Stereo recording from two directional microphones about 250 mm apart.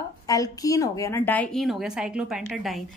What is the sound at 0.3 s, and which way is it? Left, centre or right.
A woman's voice, centre.